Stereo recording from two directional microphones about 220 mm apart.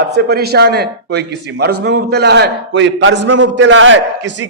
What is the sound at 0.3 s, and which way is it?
A man's voice, 45° right (ahead or behind).